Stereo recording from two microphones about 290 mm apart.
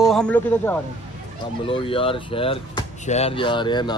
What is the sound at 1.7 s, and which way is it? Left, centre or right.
Speech, centre.